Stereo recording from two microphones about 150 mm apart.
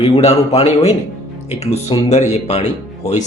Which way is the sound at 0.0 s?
45° left (ahead or behind).